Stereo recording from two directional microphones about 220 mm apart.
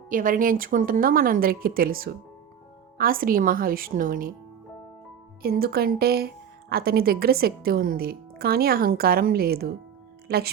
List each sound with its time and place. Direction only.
0.1 s speech: 40° right (ahead or behind)
5.4 s a woman's voice: 45° right (ahead or behind)